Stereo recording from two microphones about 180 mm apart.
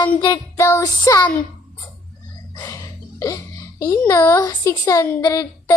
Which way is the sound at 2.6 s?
20° left (ahead or behind).